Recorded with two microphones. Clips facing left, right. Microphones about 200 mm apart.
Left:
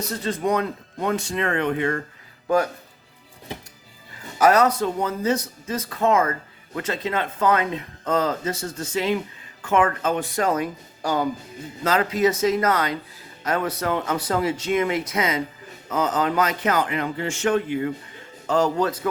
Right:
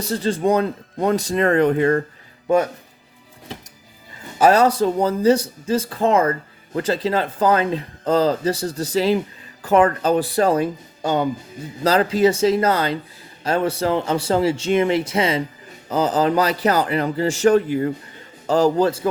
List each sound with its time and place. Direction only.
0.0 s speech: 30° right (ahead or behind)
2.5 s speech: 25° right (ahead or behind)
4.4 s speech: 30° right (ahead or behind)